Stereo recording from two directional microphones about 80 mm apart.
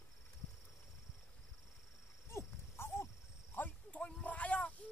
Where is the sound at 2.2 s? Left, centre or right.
Left.